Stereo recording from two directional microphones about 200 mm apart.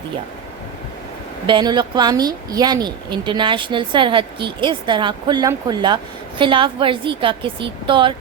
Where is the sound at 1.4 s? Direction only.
20° right (ahead or behind).